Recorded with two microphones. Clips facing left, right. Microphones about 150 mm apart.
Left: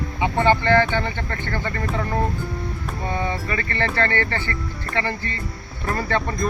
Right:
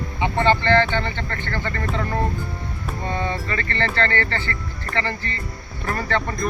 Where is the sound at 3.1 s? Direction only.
10° left (ahead or behind).